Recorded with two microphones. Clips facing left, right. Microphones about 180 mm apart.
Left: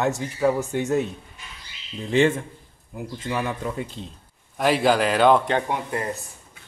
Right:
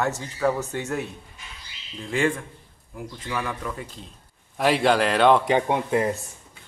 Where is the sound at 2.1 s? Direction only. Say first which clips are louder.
Left 5 dB; 25° left (ahead or behind).